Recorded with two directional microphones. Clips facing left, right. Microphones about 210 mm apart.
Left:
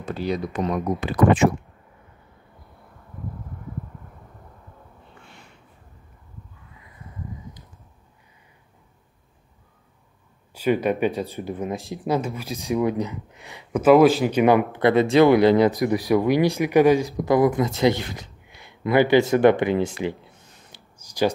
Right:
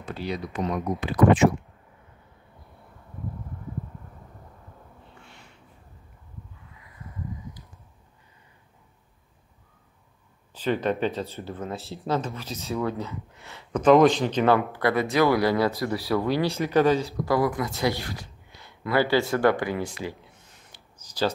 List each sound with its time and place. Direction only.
0.0 s speech: 45° left (ahead or behind)
10.5 s speech: 10° left (ahead or behind)
21.0 s a sound: 15° left (ahead or behind)